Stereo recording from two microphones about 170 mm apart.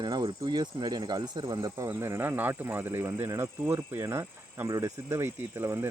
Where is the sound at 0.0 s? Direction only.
25° right (ahead or behind).